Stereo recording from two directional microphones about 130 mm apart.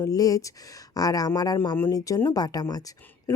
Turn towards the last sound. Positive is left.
turn(degrees=15)  # may be behind; listen again after turning